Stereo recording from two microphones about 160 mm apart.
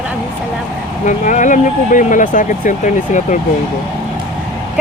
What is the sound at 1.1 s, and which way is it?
Speech, 50° left (ahead or behind).